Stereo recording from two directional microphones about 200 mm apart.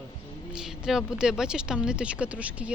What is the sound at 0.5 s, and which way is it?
Speech, centre (ahead or behind).